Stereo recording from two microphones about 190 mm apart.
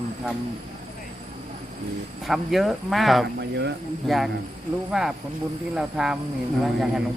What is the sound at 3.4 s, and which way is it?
Speech, 65° right (ahead or behind).